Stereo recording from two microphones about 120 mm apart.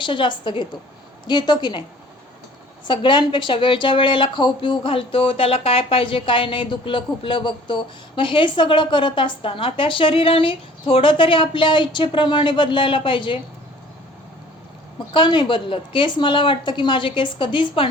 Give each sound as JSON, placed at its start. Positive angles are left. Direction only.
{"t": 0.0, "sound": "a woman's voice", "side_deg": 40}
{"t": 2.8, "sound": "speech", "side_deg": 40}
{"t": 14.9, "sound": "speech", "side_deg": 40}